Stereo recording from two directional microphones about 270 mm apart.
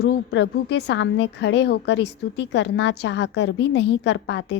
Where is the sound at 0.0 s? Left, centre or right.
Left.